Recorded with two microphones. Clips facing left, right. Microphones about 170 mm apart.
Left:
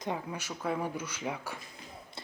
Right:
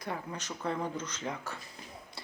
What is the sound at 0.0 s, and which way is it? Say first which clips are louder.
Speech: left 3 dB; 15° left (ahead or behind).